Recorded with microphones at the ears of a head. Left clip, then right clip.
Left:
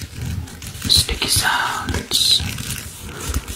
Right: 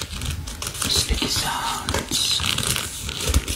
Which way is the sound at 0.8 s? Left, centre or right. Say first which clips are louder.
Left 6 dB; left.